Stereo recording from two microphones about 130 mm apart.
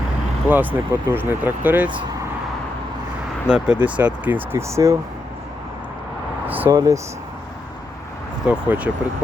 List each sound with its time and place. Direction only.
0.4 s speech: 15° right (ahead or behind)
3.5 s speech: 10° right (ahead or behind)
6.5 s a sound: 15° right (ahead or behind)
6.7 s speech: 25° right (ahead or behind)
8.4 s speech: 10° right (ahead or behind)